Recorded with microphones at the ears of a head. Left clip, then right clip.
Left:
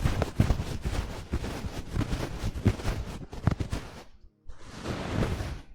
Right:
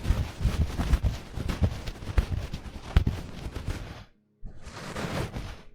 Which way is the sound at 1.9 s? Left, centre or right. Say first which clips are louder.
Left 3 dB; left.